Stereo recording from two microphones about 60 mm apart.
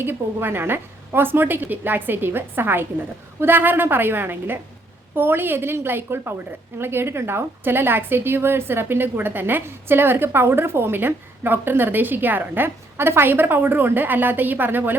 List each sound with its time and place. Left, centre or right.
0.0 s a woman's voice: right